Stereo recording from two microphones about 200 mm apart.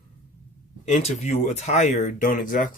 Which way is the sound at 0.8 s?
35° left (ahead or behind).